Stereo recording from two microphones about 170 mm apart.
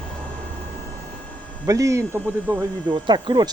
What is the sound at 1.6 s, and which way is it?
Speech, 20° right (ahead or behind).